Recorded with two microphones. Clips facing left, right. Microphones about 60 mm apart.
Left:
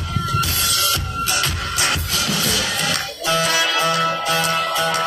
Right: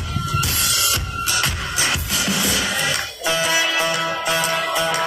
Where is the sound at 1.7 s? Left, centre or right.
Left.